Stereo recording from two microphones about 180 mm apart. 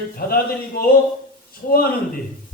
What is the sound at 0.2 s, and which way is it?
Speech, 60° left (ahead or behind).